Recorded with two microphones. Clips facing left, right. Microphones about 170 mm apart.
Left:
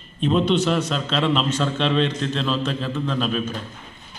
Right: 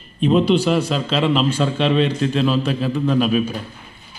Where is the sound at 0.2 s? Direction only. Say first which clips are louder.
Right 4 dB; 5° right (ahead or behind).